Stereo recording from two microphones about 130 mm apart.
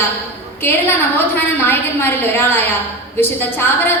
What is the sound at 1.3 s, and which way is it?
A woman's voice, 15° left (ahead or behind).